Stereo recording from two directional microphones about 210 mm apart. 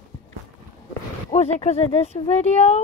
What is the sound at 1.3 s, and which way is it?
Speech, 30° left (ahead or behind).